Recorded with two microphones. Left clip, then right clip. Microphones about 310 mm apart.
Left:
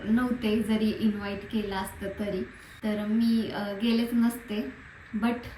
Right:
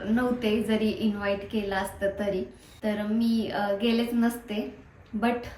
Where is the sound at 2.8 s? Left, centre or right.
Centre.